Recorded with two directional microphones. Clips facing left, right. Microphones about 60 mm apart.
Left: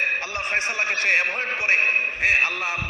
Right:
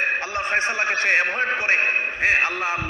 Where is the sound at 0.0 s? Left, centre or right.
Right.